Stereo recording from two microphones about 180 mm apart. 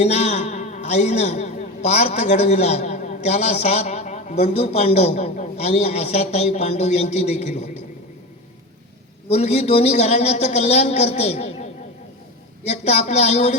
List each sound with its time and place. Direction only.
0.0 s a man's voice: 35° left (ahead or behind)
9.3 s a man's voice: 35° left (ahead or behind)